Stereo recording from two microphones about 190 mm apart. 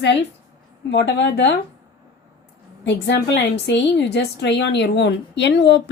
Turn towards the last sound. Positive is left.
turn(degrees=65)  # may be behind; listen again after turning